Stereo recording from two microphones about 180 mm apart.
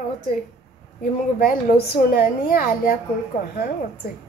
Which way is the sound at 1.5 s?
55° left (ahead or behind).